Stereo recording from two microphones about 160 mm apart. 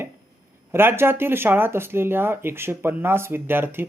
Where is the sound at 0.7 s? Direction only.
15° right (ahead or behind).